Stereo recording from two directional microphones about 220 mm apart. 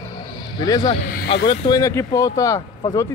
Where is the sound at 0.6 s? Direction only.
20° left (ahead or behind).